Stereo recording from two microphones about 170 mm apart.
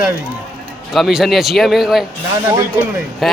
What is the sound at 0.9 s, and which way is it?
Speech, centre (ahead or behind).